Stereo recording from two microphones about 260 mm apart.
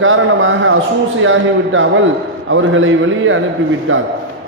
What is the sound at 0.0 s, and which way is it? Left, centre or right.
A man's voice, right.